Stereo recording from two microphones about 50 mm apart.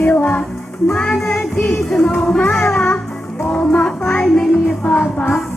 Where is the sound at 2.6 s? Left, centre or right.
Left.